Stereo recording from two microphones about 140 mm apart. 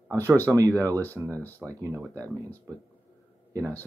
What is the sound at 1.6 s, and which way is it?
Speech, 20° right (ahead or behind).